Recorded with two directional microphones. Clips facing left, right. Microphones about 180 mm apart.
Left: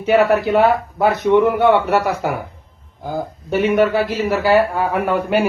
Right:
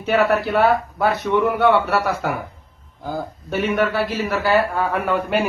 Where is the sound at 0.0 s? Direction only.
15° left (ahead or behind).